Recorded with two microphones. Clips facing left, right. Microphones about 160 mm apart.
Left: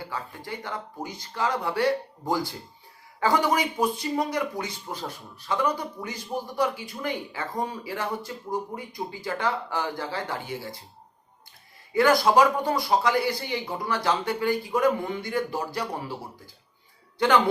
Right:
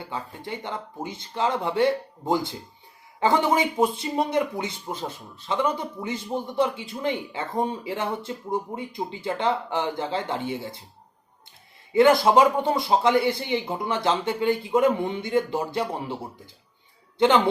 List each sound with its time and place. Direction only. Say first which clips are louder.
0.0 s speech: right 2 dB; 20° right (ahead or behind)
11.9 s speech: right 3 dB; 25° right (ahead or behind)
17.2 s speech: right 2 dB; 25° right (ahead or behind)